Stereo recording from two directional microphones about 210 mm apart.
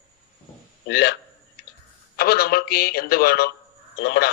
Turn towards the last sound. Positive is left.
turn(degrees=55)  # may be behind; listen again after turning